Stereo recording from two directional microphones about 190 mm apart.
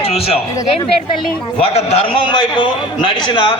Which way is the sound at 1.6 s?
30° left (ahead or behind).